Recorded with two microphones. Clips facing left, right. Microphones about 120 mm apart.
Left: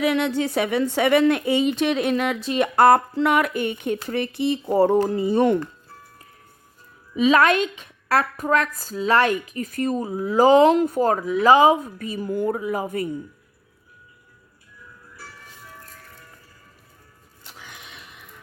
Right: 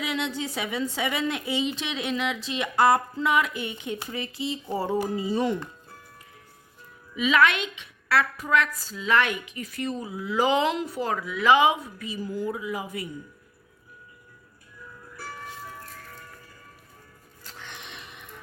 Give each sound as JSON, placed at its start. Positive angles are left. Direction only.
{"t": 0.0, "sound": "a woman's voice", "side_deg": 55}
{"t": 7.2, "sound": "a woman's voice", "side_deg": 40}
{"t": 17.4, "sound": "a sound", "side_deg": 5}